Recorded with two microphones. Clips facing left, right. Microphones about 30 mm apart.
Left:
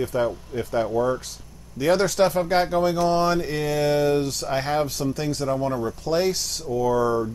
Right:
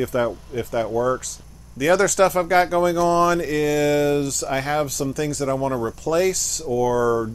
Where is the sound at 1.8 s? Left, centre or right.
Right.